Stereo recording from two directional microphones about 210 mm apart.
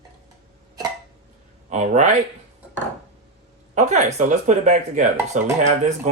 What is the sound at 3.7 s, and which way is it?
Speech, 35° right (ahead or behind).